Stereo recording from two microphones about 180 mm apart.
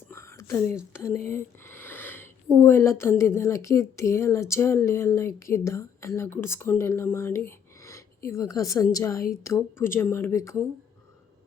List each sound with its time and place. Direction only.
0.1 s whispering: 15° left (ahead or behind)
0.9 s a woman's voice: 15° left (ahead or behind)
1.3 s a sound: 15° left (ahead or behind)
2.6 s a woman's voice: 15° left (ahead or behind)